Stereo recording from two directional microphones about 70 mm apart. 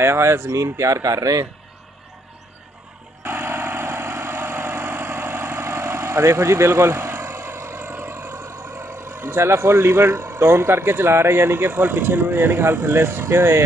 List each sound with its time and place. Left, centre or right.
0.0 s speech: right
3.3 s vehicle: right